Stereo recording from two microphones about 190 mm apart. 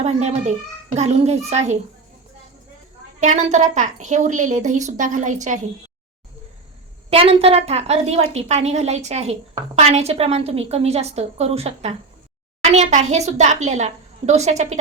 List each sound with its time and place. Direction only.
0.0 s a woman's voice: 35° right (ahead or behind)
3.2 s a woman's voice: 40° right (ahead or behind)
7.1 s a woman's voice: 30° right (ahead or behind)